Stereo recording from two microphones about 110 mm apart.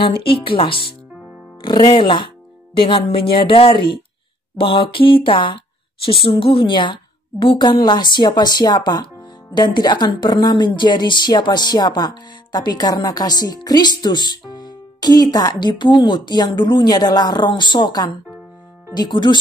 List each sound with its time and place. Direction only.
0.0 s a woman's voice: 50° left (ahead or behind)